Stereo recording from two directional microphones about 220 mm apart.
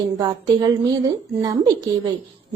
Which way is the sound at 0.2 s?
15° right (ahead or behind).